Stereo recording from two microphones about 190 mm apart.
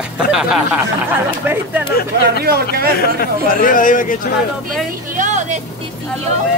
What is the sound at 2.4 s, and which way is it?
Speech, 55° right (ahead or behind).